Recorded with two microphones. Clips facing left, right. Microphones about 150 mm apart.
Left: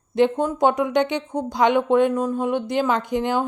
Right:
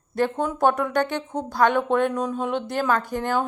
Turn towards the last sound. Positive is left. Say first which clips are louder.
# left 2 dB
turn(degrees=15)  # may be behind; listen again after turning